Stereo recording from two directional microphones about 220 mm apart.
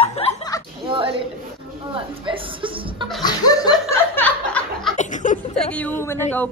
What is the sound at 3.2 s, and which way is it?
Chuckle, 15° left (ahead or behind).